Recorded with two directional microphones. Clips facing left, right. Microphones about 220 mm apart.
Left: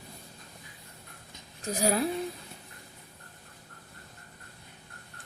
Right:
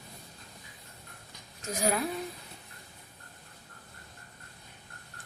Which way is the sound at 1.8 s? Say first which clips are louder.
Left 3 dB; 35° left (ahead or behind).